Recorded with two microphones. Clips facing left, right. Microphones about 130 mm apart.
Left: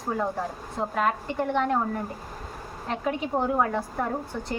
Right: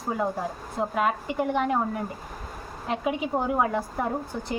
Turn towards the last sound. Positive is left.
turn(degrees=-10)  # may be behind; listen again after turning